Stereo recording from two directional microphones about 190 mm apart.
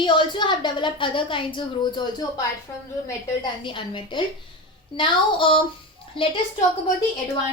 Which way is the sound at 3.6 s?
25° left (ahead or behind).